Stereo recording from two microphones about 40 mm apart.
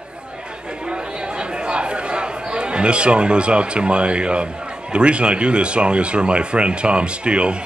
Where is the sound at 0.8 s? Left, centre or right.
Right.